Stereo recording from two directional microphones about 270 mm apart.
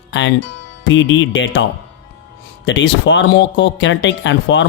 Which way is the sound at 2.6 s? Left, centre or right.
Left.